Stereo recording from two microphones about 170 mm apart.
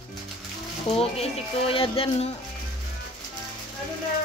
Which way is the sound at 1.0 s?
35° left (ahead or behind).